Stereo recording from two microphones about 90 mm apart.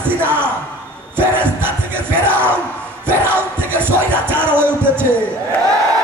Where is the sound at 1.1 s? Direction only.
25° right (ahead or behind).